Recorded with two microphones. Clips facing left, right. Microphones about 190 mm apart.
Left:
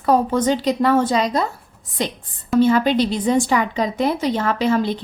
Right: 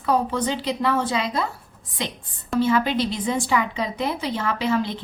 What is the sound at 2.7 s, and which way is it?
A woman's voice, 35° left (ahead or behind).